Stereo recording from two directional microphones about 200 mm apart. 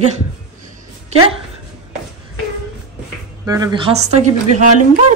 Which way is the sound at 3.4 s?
20° right (ahead or behind).